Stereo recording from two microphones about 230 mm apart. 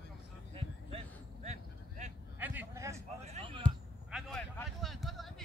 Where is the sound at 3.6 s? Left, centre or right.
Centre.